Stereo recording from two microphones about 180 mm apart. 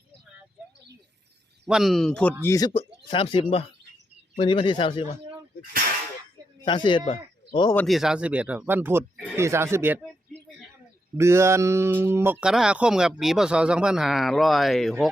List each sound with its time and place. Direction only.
1.6 s speech: centre (ahead or behind)
2.4 s speech: 20° left (ahead or behind)
6.7 s speech: 25° left (ahead or behind)
7.9 s speech: centre (ahead or behind)
11.2 s speech: 15° right (ahead or behind); by 15.1 s centre (ahead or behind)